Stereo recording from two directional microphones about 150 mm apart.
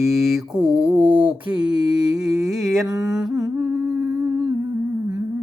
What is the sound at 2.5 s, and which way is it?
Mantra, centre (ahead or behind).